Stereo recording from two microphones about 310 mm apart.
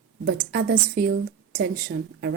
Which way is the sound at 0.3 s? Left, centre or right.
Right.